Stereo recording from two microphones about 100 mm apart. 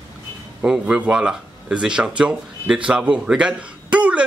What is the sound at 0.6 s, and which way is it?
Speech, 5° right (ahead or behind).